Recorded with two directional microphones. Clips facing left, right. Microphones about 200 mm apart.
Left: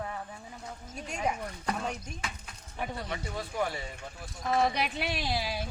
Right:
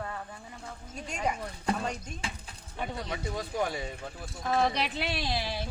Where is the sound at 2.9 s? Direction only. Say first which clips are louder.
Right 2 dB; 15° right (ahead or behind).